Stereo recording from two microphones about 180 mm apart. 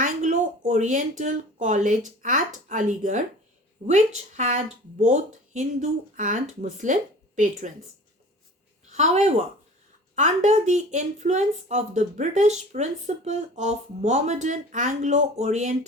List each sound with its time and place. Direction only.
0.0 s a sound: 40° right (ahead or behind)
2.0 s speech: 45° right (ahead or behind)
8.9 s speech: 40° right (ahead or behind)